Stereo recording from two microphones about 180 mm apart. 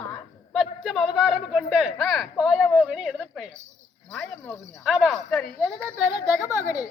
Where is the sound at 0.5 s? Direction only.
Centre (ahead or behind).